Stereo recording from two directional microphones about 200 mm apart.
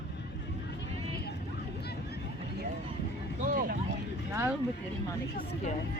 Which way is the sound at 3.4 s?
45° right (ahead or behind).